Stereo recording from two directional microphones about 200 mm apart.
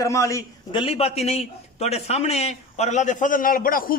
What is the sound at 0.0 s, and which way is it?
A man's voice, 15° left (ahead or behind).